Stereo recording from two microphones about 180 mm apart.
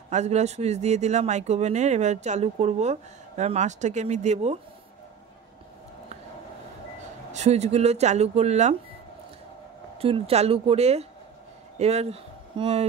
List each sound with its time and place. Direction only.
0.1 s speech: 40° right (ahead or behind)
7.3 s speech: 35° right (ahead or behind)
9.9 s speech: 30° right (ahead or behind)